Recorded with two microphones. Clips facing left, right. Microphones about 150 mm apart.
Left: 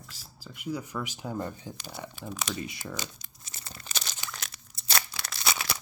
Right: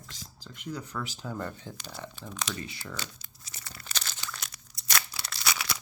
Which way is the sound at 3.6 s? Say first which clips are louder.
Left 1 dB; 25° left (ahead or behind).